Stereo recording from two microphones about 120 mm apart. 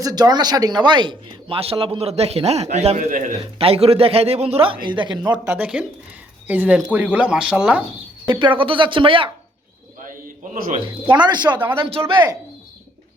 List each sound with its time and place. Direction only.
0.0 s a man's voice: 35° right (ahead or behind); by 3.3 s 85° right
3.6 s a man's voice: 55° right (ahead or behind); by 5.4 s 35° right (ahead or behind)
5.5 s speech: 10° right (ahead or behind)
8.3 s a man's voice: 40° right (ahead or behind)
11.1 s speech: 35° right (ahead or behind)
11.8 s a man's voice: 50° right (ahead or behind)